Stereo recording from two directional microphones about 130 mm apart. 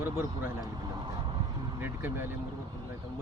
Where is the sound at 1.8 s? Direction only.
15° right (ahead or behind).